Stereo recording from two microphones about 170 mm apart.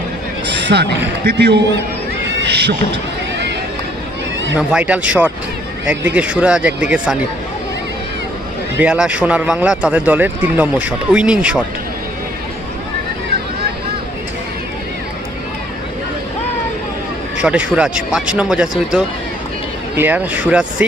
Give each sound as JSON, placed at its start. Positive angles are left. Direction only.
{"t": 0.4, "sound": "speech", "side_deg": -80}
{"t": 4.5, "sound": "speech", "side_deg": -10}
{"t": 8.8, "sound": "speech", "side_deg": -5}
{"t": 17.3, "sound": "speech", "side_deg": -5}